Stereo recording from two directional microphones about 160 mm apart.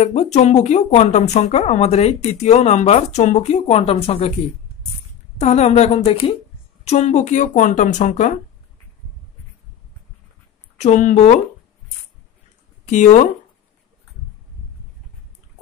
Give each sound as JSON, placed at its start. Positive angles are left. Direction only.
{"t": 0.0, "sound": "speech", "side_deg": 45}
{"t": 5.4, "sound": "speech", "side_deg": 45}
{"t": 10.8, "sound": "speech", "side_deg": 50}
{"t": 12.8, "sound": "speech", "side_deg": 45}